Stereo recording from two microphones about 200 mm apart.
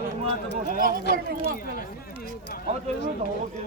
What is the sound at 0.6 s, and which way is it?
Speech, 45° right (ahead or behind).